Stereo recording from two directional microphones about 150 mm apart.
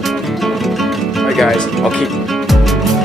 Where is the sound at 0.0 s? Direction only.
Centre (ahead or behind).